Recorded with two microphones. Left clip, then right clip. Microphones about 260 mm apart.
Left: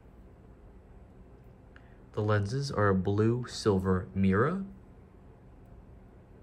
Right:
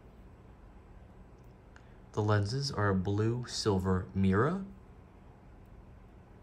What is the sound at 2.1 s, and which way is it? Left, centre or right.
Speech, centre.